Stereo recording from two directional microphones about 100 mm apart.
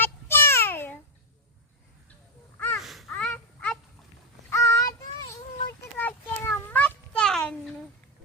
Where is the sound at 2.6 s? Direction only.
20° left (ahead or behind).